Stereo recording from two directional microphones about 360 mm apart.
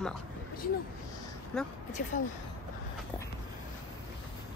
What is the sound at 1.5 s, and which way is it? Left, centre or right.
Speech, centre.